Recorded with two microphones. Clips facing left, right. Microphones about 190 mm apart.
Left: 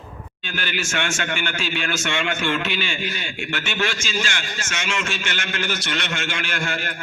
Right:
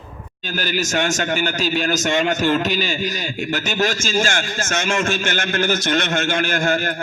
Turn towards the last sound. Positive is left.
turn(degrees=-45)  # may be behind; listen again after turning